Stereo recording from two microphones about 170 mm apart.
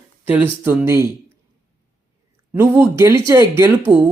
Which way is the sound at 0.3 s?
10° right (ahead or behind).